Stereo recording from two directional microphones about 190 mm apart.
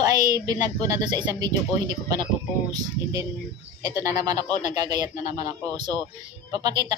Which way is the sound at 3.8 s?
20° right (ahead or behind).